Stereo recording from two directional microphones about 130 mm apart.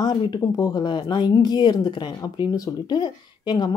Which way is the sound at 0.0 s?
30° left (ahead or behind).